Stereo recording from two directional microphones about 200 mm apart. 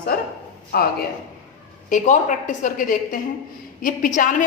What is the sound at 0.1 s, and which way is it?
Speech, 50° left (ahead or behind).